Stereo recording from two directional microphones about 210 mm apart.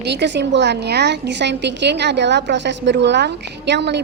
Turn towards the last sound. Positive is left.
turn(degrees=-55)  # may be behind; listen again after turning